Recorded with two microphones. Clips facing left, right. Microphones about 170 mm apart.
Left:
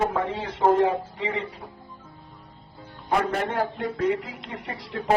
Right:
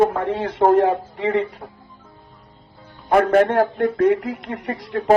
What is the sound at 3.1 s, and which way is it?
Speech, 60° right (ahead or behind).